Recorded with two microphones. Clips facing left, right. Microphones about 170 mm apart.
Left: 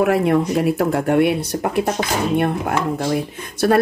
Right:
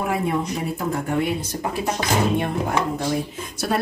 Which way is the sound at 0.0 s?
75° left (ahead or behind).